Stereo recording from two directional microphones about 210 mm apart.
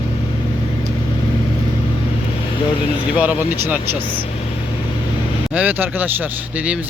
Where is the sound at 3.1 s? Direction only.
5° right (ahead or behind).